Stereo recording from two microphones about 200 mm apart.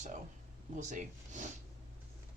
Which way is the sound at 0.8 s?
35° right (ahead or behind).